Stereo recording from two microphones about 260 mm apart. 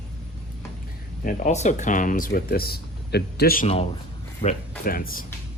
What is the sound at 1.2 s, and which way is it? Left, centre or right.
Speech, left.